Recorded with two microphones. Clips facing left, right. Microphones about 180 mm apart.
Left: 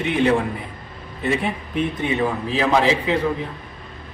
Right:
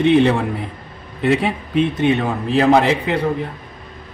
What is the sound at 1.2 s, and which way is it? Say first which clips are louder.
A man's voice: right 5 dB; 90° right.